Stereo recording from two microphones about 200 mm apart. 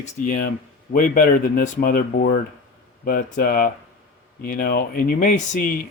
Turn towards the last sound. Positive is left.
turn(degrees=45)  # may be behind; listen again after turning